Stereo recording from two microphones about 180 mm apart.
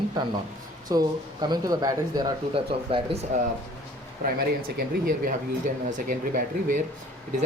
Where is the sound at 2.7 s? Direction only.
30° right (ahead or behind).